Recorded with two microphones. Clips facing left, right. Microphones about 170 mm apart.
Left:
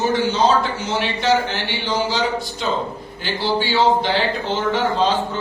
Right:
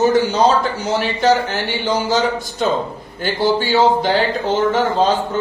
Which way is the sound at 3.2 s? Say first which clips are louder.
Right 4 dB; 45° right (ahead or behind).